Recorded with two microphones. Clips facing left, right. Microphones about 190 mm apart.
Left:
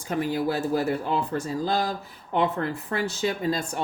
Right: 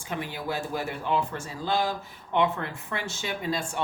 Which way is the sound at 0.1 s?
40° left (ahead or behind).